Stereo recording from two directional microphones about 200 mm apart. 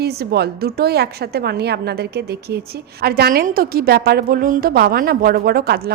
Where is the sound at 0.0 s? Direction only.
50° right (ahead or behind).